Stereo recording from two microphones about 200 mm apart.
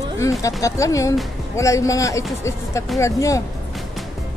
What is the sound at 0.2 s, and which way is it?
A woman's voice, 15° left (ahead or behind).